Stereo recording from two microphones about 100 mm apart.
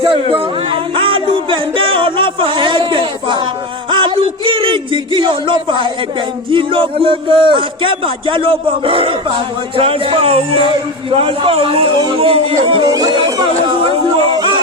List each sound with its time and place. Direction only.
0.0 s music: 65° right (ahead or behind)
3.8 s a man's voice: 55° right (ahead or behind)
12.8 s speech: 40° right (ahead or behind)